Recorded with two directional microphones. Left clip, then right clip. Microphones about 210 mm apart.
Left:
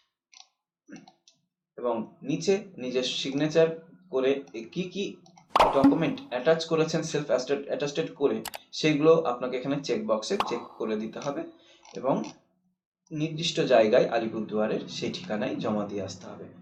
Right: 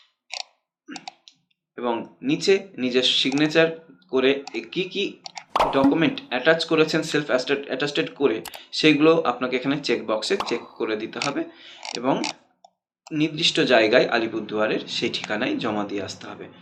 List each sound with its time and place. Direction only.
1.7 s speech: 20° right (ahead or behind)
5.5 s a sound: centre (ahead or behind)
5.9 s speech: 20° right (ahead or behind)
8.4 s speech: centre (ahead or behind)
8.8 s speech: 20° right (ahead or behind)